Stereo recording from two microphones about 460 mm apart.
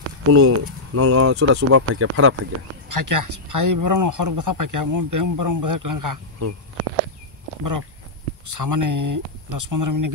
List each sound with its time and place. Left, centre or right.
0.3 s speech: right
2.9 s speech: right
8.5 s speech: right